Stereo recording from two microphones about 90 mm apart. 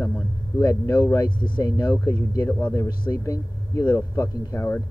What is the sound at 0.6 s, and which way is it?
Speech, 40° left (ahead or behind).